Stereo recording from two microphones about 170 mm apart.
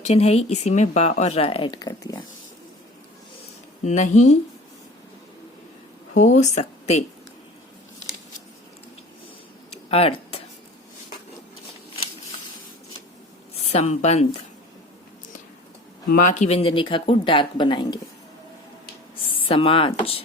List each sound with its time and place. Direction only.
0.0 s speech: 40° left (ahead or behind)
3.8 s speech: 45° left (ahead or behind)
6.1 s speech: 45° left (ahead or behind)
9.6 s a sound: 35° left (ahead or behind)
13.5 s speech: 40° left (ahead or behind)
16.0 s speech: 50° left (ahead or behind); by 18.0 s 25° left (ahead or behind)
19.4 s speech: 30° left (ahead or behind)